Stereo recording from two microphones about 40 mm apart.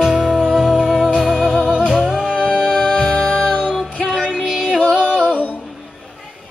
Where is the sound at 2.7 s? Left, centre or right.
Centre.